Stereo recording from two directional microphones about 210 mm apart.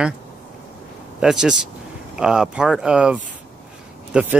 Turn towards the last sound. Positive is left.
turn(degrees=-5)  # may be behind; listen again after turning